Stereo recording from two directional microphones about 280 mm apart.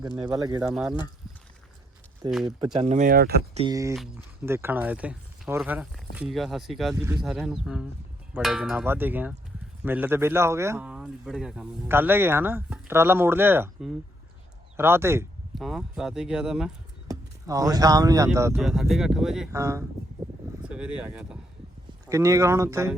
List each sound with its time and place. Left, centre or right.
0.3 s speech: centre
0.7 s speech: centre
2.2 s speech: centre; by 3.6 s right
3.6 s speech: centre